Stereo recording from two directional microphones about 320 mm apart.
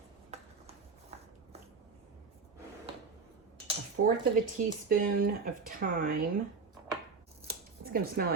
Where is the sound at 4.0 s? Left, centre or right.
Right.